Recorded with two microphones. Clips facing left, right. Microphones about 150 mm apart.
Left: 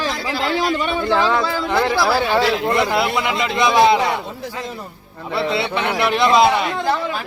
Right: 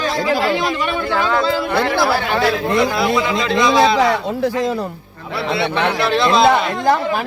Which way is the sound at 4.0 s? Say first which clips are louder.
Right 6 dB; 90° right.